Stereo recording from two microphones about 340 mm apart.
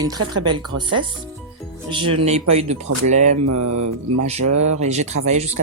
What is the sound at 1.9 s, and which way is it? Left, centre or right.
Speech, centre.